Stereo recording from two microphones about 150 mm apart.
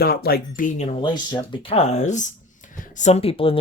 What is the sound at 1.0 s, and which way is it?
Speech, 30° left (ahead or behind).